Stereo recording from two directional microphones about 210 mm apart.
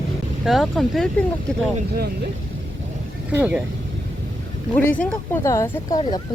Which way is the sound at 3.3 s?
5° right (ahead or behind).